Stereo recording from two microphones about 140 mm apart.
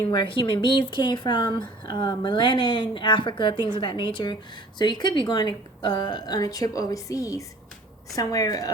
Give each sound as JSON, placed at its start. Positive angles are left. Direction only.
{"t": 0.1, "sound": "a woman's voice", "side_deg": 35}